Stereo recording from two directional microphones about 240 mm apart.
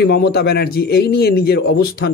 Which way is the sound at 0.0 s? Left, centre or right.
Left.